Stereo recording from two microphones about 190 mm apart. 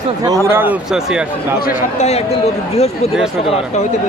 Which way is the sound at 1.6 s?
40° left (ahead or behind).